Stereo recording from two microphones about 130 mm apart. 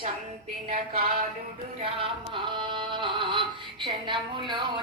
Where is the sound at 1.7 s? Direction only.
45° right (ahead or behind).